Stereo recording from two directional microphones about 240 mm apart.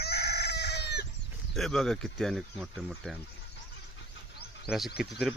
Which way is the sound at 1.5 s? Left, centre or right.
Centre.